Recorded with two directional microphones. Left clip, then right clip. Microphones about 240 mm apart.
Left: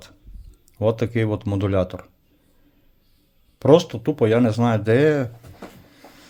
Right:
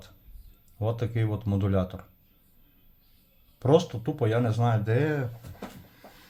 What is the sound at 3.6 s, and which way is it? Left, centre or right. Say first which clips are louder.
Speech: left 8 dB; left.